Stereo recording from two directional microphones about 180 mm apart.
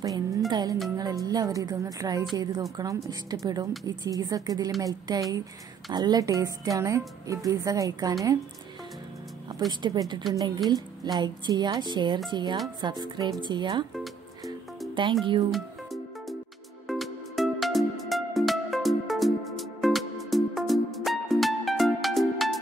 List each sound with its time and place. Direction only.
0.0 s a woman's voice: 20° right (ahead or behind)
9.7 s a woman's voice: 25° right (ahead or behind)
15.5 s music: centre (ahead or behind)